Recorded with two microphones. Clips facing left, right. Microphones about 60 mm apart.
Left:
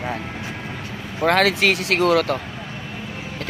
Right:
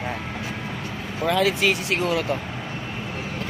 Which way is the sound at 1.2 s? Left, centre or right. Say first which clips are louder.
Left 3 dB; left.